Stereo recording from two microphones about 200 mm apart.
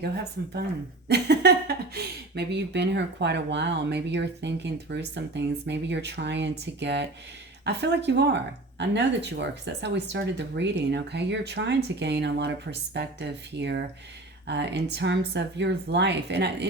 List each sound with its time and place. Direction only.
1.0 s speech: 55° right (ahead or behind)